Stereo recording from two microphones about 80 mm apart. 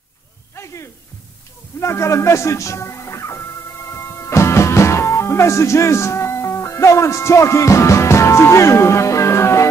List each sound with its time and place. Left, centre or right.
1.8 s music: left